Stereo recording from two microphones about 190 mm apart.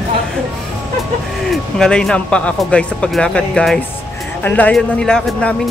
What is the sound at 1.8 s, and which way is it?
Speech, 5° left (ahead or behind).